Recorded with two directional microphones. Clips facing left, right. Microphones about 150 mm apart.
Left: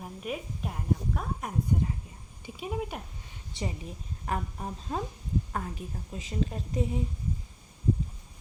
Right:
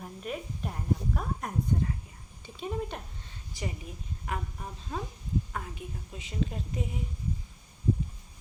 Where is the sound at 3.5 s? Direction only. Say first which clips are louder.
Left 2 dB; 30° left (ahead or behind).